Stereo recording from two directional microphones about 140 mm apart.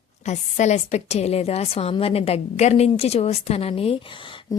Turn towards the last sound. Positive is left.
turn(degrees=35)  # may be behind; listen again after turning